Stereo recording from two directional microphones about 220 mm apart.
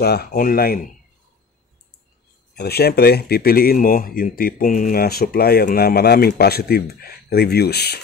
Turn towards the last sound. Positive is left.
turn(degrees=45)  # may be behind; listen again after turning